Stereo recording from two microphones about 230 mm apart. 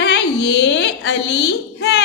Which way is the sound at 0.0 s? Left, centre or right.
Left.